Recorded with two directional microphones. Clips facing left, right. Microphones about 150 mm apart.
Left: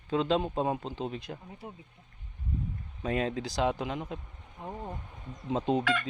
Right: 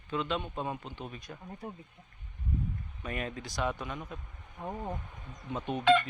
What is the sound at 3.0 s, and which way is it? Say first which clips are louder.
Speech: left 7 dB; 90° left.